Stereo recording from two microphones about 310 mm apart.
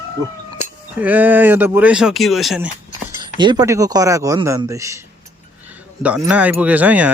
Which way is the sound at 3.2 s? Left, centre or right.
Centre.